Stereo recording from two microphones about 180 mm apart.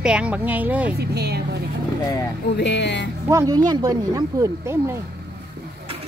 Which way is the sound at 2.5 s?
75° left (ahead or behind).